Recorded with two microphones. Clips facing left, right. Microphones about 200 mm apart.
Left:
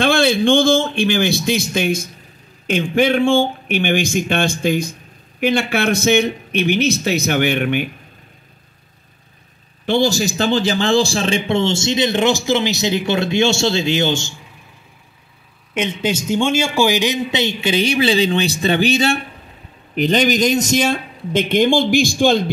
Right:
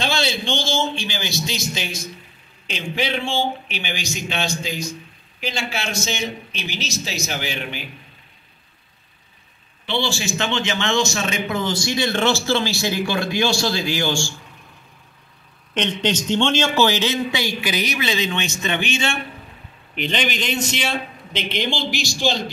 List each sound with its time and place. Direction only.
0.0 s a man's voice: 55° left (ahead or behind)
9.8 s a man's voice: 40° left (ahead or behind); by 14.3 s 20° left (ahead or behind)
15.7 s a man's voice: 10° left (ahead or behind); by 22.4 s 55° left (ahead or behind)